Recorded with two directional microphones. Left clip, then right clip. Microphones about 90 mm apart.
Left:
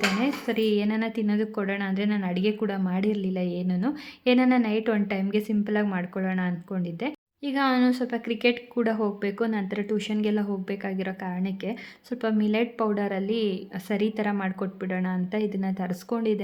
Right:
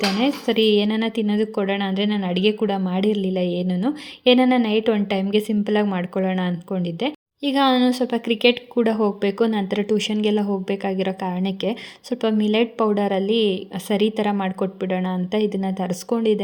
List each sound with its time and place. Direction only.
0.2 s a woman's voice: 40° right (ahead or behind)
5.1 s a woman's voice: 35° right (ahead or behind); by 11.8 s 50° right (ahead or behind)
12.1 s a woman's voice: 35° right (ahead or behind)